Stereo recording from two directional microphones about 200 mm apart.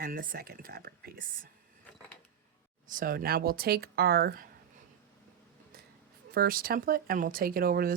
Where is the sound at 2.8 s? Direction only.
45° right (ahead or behind).